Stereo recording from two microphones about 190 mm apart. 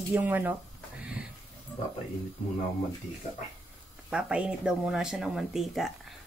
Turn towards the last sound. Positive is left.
turn(degrees=0)  # may be behind; listen again after turning